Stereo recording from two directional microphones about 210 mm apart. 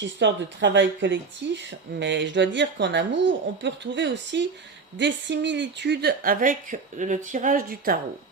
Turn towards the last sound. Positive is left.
turn(degrees=-45)  # may be behind; listen again after turning